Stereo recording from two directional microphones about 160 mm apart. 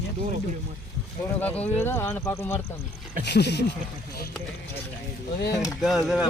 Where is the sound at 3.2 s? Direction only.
90° left.